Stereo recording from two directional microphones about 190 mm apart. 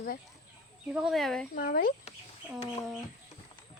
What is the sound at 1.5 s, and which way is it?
Speech, 50° left (ahead or behind).